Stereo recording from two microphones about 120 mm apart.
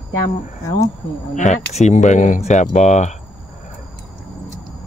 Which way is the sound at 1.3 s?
80° left.